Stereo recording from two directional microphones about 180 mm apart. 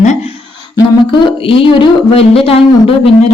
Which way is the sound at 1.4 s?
30° left (ahead or behind).